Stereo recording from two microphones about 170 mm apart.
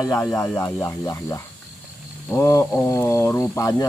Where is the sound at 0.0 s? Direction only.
15° left (ahead or behind).